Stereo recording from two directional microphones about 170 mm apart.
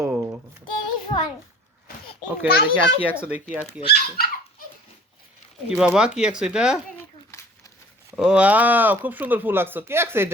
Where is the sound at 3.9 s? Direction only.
65° left (ahead or behind).